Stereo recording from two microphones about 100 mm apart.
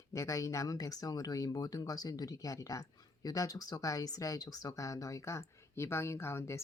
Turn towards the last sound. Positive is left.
turn(degrees=30)  # may be behind; listen again after turning